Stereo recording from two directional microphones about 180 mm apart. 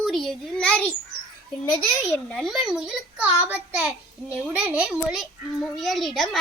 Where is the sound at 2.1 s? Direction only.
5° left (ahead or behind).